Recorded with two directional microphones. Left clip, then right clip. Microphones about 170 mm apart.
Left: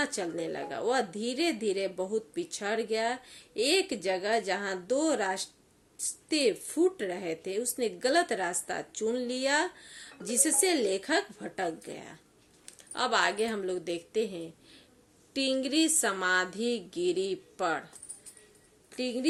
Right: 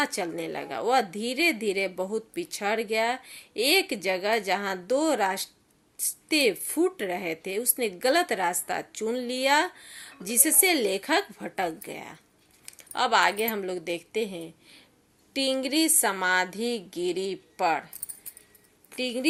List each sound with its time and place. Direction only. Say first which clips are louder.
0.0 s a woman's voice: right 3 dB; 20° right (ahead or behind)
18.9 s speech: right 4 dB; 20° right (ahead or behind)